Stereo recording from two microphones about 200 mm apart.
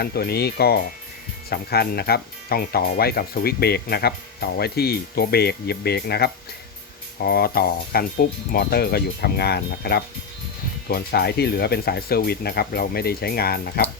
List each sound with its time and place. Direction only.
0.0 s speech: 50° left (ahead or behind)